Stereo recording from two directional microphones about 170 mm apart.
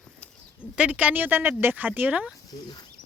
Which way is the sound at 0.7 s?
10° right (ahead or behind).